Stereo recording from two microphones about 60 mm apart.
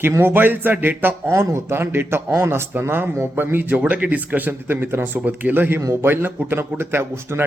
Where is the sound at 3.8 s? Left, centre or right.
Right.